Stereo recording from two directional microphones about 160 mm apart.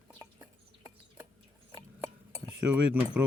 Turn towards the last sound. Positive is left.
turn(degrees=-10)  # may be behind; listen again after turning